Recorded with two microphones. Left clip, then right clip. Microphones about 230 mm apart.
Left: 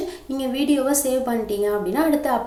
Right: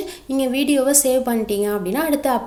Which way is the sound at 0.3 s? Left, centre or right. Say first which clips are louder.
Right 3 dB; right.